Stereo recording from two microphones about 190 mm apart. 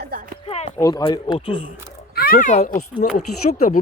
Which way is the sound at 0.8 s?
20° left (ahead or behind).